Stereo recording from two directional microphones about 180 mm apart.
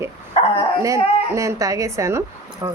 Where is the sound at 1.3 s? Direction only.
15° right (ahead or behind).